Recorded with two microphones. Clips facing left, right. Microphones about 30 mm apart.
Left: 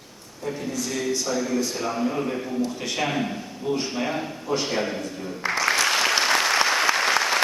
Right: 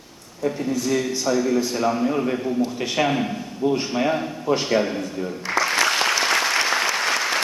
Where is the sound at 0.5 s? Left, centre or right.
Centre.